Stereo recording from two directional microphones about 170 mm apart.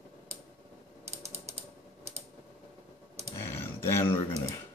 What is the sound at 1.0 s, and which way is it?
Ratchet, 40° right (ahead or behind).